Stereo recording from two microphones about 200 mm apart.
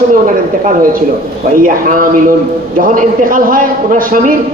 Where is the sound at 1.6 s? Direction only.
45° right (ahead or behind).